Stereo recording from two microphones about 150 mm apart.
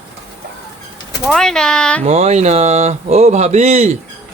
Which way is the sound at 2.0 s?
45° right (ahead or behind).